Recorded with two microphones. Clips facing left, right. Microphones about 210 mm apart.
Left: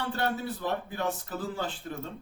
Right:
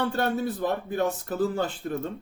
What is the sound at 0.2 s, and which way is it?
Speech, 50° right (ahead or behind).